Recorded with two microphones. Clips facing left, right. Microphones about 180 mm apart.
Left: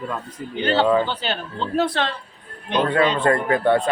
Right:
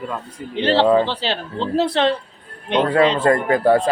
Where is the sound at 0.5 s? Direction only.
30° right (ahead or behind).